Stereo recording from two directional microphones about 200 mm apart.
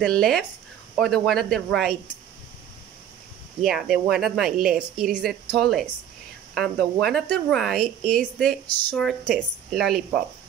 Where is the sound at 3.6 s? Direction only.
Centre (ahead or behind).